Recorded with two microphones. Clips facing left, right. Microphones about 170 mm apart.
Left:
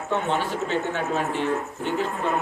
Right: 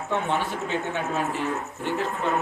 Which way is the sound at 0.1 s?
10° right (ahead or behind).